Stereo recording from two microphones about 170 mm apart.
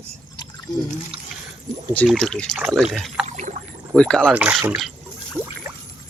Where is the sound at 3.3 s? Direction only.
45° right (ahead or behind).